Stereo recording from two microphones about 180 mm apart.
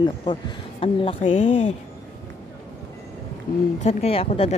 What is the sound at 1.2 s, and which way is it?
Speech, 40° left (ahead or behind).